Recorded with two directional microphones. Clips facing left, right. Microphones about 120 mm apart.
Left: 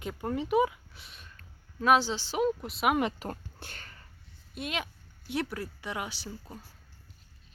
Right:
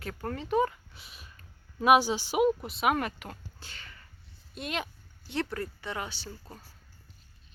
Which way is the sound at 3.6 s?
50° left (ahead or behind).